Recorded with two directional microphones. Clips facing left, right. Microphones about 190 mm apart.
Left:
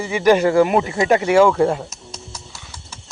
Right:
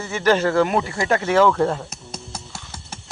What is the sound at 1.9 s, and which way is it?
Music, 55° right (ahead or behind).